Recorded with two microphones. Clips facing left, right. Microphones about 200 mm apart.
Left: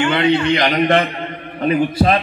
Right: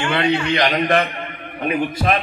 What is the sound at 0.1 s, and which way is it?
A man's voice, 25° left (ahead or behind).